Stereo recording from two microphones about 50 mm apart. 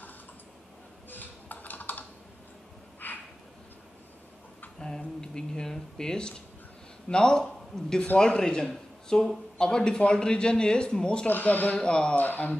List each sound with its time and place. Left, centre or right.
1.1 s computer keyboard: left
3.0 s a sound: left
4.7 s a sound: centre
7.1 s a man's voice: centre
11.2 s speech: left
11.8 s a man's voice: centre
12.2 s speech: left